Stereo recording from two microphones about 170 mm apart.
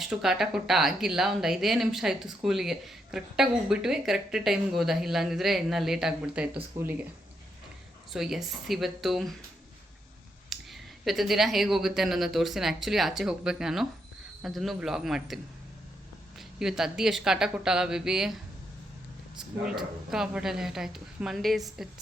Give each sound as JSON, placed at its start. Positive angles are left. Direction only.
{"t": 0.0, "sound": "speech", "side_deg": -5}
{"t": 8.1, "sound": "speech", "side_deg": 0}
{"t": 10.5, "sound": "speech", "side_deg": 0}
{"t": 16.6, "sound": "speech", "side_deg": -5}
{"t": 19.6, "sound": "speech", "side_deg": -5}